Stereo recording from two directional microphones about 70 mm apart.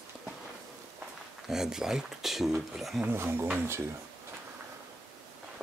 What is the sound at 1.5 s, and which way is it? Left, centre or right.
Speech, centre.